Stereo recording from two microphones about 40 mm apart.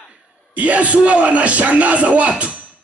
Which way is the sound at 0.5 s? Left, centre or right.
Right.